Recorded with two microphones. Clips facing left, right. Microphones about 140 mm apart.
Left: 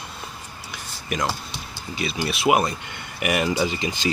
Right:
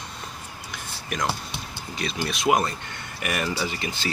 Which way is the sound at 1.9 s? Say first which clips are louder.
Left 3 dB; 5° left (ahead or behind).